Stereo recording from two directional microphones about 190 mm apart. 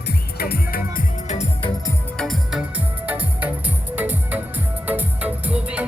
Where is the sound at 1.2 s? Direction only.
35° left (ahead or behind).